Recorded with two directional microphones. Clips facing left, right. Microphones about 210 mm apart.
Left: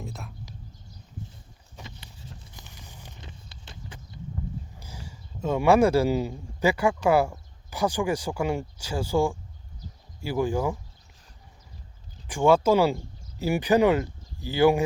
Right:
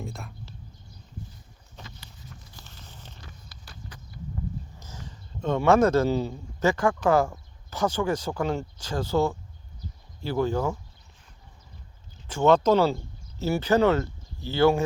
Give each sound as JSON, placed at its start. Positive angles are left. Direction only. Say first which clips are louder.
{"t": 0.0, "sound": "speech", "louder": "right 1 dB", "side_deg": 0}
{"t": 1.7, "sound": "a sound", "louder": "left 1 dB", "side_deg": 20}
{"t": 3.2, "sound": "horse", "louder": "left 2 dB", "side_deg": 25}
{"t": 4.8, "sound": "a man's voice", "louder": "even", "side_deg": 10}
{"t": 12.3, "sound": "speech", "louder": "even", "side_deg": 10}